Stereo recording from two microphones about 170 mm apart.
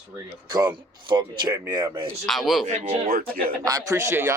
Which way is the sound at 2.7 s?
45° right (ahead or behind).